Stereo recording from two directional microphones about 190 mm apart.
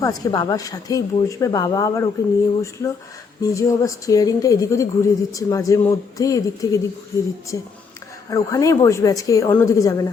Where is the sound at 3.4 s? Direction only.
15° left (ahead or behind).